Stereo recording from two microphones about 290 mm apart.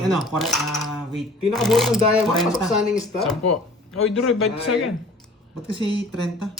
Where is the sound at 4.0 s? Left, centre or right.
Left.